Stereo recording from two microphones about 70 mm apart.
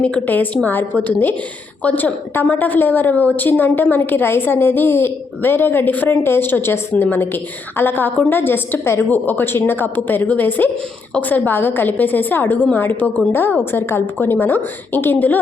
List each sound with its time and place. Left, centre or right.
0.0 s a woman's voice: left